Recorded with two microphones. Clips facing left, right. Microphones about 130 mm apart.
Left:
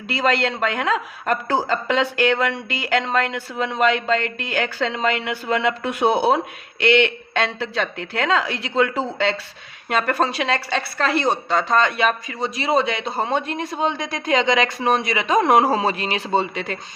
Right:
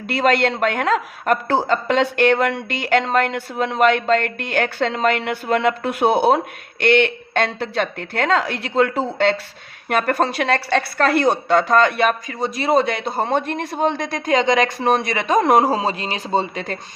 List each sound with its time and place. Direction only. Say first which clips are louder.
0.1 s speech: right 3 dB; 55° right (ahead or behind); by 9.0 s 40° right (ahead or behind)
9.9 s speech: right 2 dB; 50° right (ahead or behind); by 16.7 s 35° right (ahead or behind)